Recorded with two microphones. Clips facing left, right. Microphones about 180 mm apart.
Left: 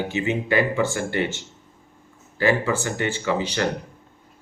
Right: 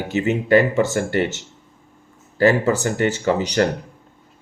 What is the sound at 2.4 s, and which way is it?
Speech, 40° right (ahead or behind).